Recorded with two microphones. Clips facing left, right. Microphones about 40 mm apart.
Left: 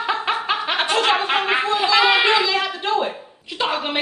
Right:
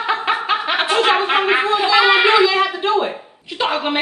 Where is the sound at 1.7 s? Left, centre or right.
Centre.